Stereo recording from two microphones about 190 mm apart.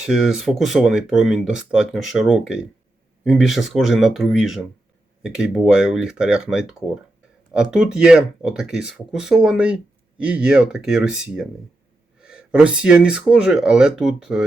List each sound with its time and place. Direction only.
0.0 s speech: 5° right (ahead or behind)